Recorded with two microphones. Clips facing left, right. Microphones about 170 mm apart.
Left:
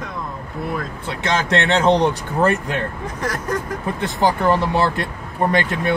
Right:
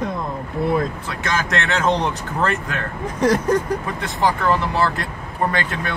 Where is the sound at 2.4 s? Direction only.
20° left (ahead or behind).